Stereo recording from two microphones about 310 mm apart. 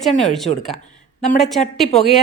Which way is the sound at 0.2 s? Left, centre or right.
Centre.